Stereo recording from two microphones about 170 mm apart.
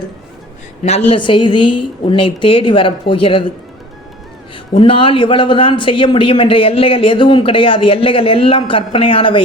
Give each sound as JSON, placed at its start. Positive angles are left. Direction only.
{"t": 0.8, "sound": "a man's voice", "side_deg": 40}
{"t": 4.5, "sound": "a man's voice", "side_deg": 30}